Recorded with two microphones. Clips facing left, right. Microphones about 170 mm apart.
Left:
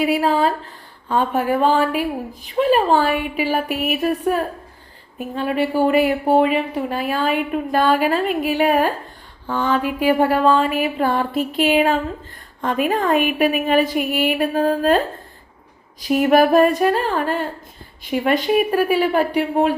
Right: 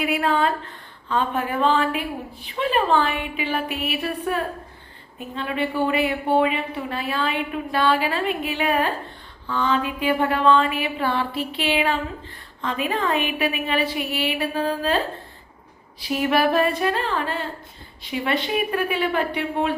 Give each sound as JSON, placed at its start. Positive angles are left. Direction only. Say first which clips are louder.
{"t": 0.0, "sound": "a woman's voice", "louder": "left 4 dB", "side_deg": 35}